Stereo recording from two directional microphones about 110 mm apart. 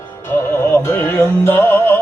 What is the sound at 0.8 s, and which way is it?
Music, 20° left (ahead or behind).